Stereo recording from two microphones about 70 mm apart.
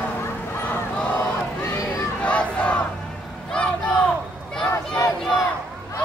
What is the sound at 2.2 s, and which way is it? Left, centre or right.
Battle cry, centre.